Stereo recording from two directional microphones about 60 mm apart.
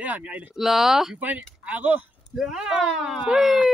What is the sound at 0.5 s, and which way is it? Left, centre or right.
Speech, centre.